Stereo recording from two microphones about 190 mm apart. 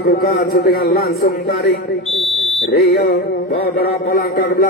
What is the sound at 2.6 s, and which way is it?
A man's voice, 55° left (ahead or behind).